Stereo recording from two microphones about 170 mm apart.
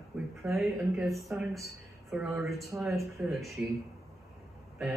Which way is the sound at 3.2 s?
Centre (ahead or behind).